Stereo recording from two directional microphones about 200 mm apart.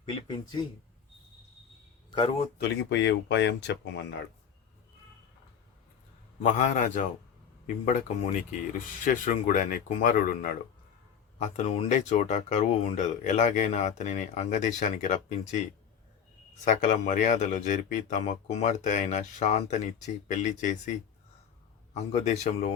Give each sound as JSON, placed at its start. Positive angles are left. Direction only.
{"t": 0.0, "sound": "speech", "side_deg": 25}
{"t": 2.0, "sound": "speech", "side_deg": 25}
{"t": 2.6, "sound": "speech", "side_deg": 60}
{"t": 6.4, "sound": "speech", "side_deg": 40}
{"t": 11.3, "sound": "speech", "side_deg": 35}
{"t": 16.6, "sound": "speech", "side_deg": 40}
{"t": 22.1, "sound": "speech", "side_deg": 35}